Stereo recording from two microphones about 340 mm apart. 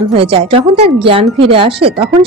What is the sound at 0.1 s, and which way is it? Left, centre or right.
A woman's voice, centre.